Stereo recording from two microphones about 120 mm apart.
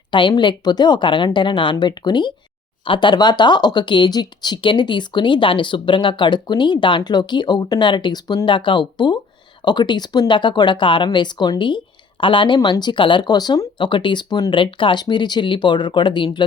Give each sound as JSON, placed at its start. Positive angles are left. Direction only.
{"t": 0.1, "sound": "speech", "side_deg": 40}
{"t": 12.5, "sound": "speech", "side_deg": 35}